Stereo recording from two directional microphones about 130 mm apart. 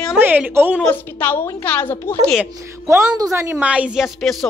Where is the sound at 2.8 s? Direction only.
20° right (ahead or behind); by 4.3 s centre (ahead or behind).